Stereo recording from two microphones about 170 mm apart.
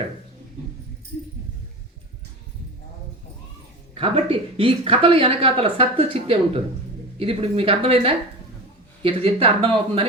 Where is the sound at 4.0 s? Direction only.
30° right (ahead or behind).